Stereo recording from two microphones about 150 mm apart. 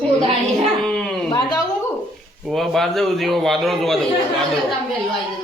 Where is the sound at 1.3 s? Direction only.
30° left (ahead or behind).